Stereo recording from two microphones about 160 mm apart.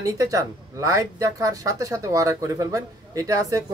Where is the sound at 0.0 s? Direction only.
20° right (ahead or behind).